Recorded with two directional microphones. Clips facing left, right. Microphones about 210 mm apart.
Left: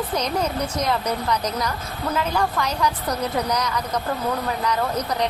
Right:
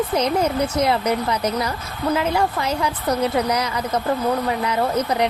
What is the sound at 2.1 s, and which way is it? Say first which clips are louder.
Speech: right 3 dB; 20° right (ahead or behind).